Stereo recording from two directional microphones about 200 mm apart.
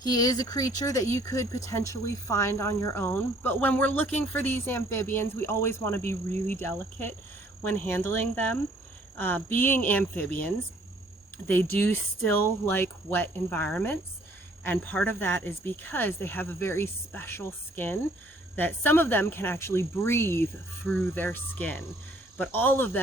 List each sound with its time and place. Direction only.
0.0 s speech: 20° left (ahead or behind)